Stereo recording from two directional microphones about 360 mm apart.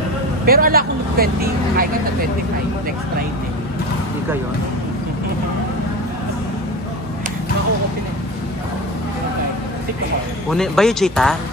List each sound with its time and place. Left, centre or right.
0.5 s speech: right
10.5 s speech: centre